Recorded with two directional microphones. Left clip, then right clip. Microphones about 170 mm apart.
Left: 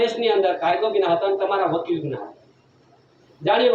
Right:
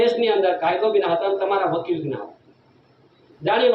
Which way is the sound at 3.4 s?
15° left (ahead or behind).